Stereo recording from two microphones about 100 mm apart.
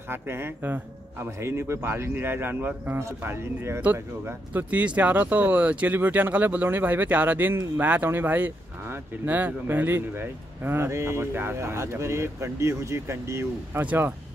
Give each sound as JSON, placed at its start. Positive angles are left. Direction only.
{"t": 0.1, "sound": "speech", "side_deg": -25}